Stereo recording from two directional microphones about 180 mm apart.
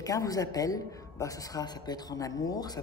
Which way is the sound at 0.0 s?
20° left (ahead or behind).